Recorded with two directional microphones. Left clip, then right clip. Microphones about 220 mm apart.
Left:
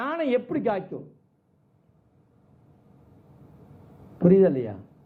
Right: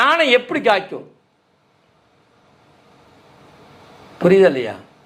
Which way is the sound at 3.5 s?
10° right (ahead or behind).